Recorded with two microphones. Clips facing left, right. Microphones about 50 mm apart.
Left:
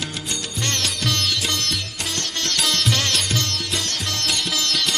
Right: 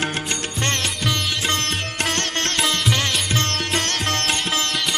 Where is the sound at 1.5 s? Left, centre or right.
Right.